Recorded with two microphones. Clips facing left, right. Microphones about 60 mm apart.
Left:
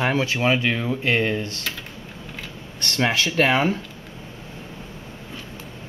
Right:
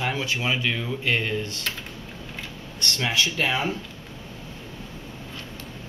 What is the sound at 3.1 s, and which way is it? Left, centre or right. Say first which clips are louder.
Speech: left 5 dB; left.